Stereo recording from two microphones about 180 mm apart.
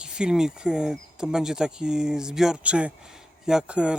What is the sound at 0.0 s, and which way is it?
Speech, 5° right (ahead or behind).